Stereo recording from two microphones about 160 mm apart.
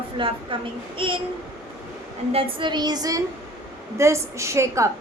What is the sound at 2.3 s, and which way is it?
A woman's voice, 35° right (ahead or behind).